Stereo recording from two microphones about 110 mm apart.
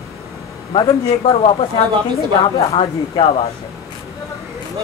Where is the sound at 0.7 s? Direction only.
55° left (ahead or behind).